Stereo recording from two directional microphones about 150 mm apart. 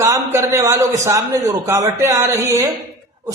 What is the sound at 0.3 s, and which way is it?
A man's voice, 20° right (ahead or behind).